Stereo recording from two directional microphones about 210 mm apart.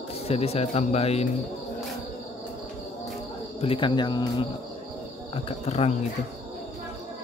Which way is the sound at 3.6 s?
25° left (ahead or behind).